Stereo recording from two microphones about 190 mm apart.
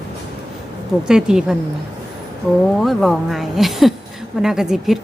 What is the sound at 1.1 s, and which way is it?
Speech, 5° right (ahead or behind).